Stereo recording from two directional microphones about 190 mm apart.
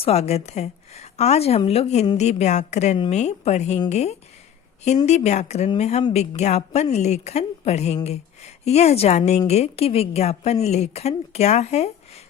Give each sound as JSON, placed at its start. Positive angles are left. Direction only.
{"t": 0.0, "sound": "a woman's voice", "side_deg": 35}